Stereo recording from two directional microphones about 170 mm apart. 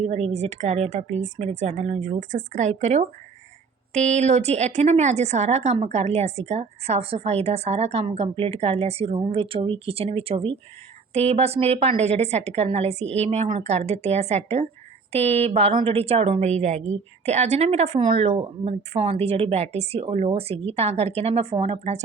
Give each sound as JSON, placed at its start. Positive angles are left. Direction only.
{"t": 0.0, "sound": "speech", "side_deg": -40}